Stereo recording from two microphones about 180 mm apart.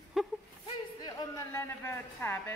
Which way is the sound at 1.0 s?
20° left (ahead or behind).